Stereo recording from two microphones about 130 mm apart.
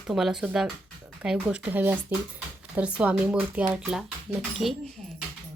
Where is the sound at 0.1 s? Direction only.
5° right (ahead or behind).